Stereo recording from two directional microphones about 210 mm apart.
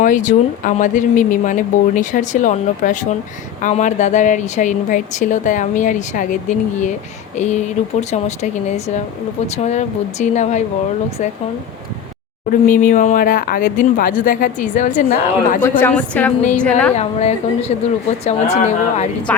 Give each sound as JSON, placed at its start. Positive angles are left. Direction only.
{"t": 0.0, "sound": "a woman's voice", "side_deg": 35}
{"t": 12.5, "sound": "a woman's voice", "side_deg": 40}
{"t": 15.6, "sound": "a woman's voice", "side_deg": 10}
{"t": 16.9, "sound": "a woman's voice", "side_deg": 30}
{"t": 19.3, "sound": "a woman's voice", "side_deg": 5}